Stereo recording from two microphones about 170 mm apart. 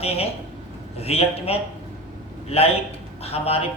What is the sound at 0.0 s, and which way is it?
A man's voice, 35° left (ahead or behind).